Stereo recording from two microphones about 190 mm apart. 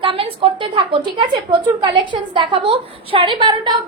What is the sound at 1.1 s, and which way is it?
A woman's voice, 25° right (ahead or behind).